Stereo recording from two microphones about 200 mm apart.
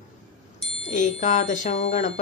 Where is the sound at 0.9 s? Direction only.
40° left (ahead or behind).